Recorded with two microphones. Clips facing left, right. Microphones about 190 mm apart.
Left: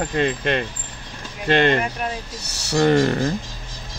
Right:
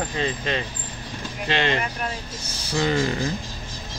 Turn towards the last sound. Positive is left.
turn(degrees=60)  # may be behind; listen again after turning